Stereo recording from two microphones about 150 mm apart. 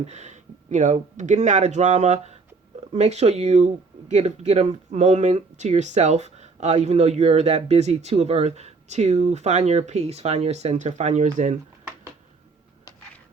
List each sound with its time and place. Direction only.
0.0 s speech: 50° right (ahead or behind)